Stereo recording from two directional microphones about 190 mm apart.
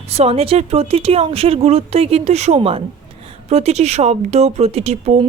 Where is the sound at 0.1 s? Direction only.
35° right (ahead or behind).